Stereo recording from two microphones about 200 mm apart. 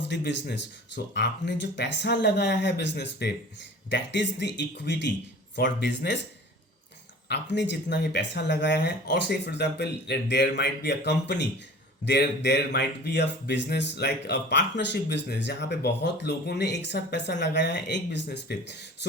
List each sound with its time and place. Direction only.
0.1 s speech: 60° left (ahead or behind)
7.3 s speech: 60° left (ahead or behind)